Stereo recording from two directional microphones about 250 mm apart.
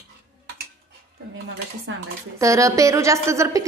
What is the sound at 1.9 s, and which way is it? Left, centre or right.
Speech, right.